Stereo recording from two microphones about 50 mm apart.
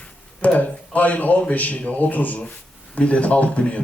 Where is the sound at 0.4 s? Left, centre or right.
Left.